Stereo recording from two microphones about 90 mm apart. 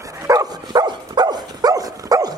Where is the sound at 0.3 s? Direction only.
45° right (ahead or behind).